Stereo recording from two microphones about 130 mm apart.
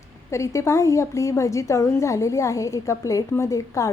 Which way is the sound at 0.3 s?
20° left (ahead or behind).